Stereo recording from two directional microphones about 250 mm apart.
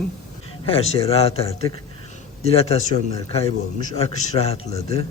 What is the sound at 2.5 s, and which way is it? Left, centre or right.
Speech, left.